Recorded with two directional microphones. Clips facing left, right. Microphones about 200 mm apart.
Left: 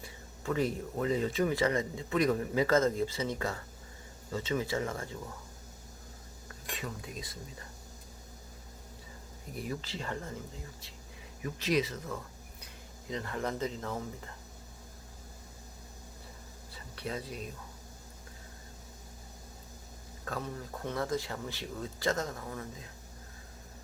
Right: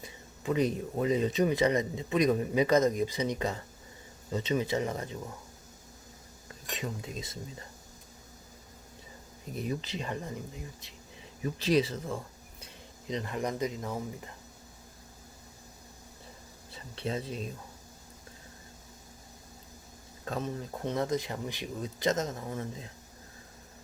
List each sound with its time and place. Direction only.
0.0 s speech: 20° right (ahead or behind)
6.5 s cutlery: 20° right (ahead or behind)
9.5 s speech: 20° right (ahead or behind)
11.4 s speech: 30° right (ahead or behind); by 14.3 s 15° right (ahead or behind)
16.7 s speech: 25° right (ahead or behind)
20.2 s speech: 20° right (ahead or behind)